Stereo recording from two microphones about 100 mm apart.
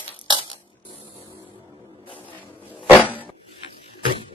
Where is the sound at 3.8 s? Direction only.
70° left (ahead or behind).